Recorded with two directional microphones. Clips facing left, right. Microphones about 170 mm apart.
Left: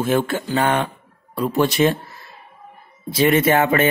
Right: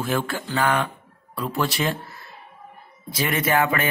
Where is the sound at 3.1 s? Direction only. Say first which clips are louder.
Left 6 dB; 25° left (ahead or behind).